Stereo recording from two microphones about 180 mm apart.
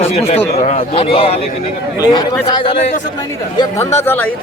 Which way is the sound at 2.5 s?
30° left (ahead or behind).